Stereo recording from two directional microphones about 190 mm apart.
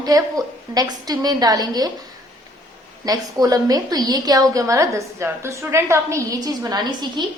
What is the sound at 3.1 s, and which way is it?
A woman's voice, 20° right (ahead or behind).